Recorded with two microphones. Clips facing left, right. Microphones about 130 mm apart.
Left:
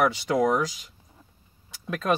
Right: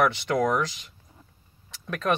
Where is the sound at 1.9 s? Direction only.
5° left (ahead or behind).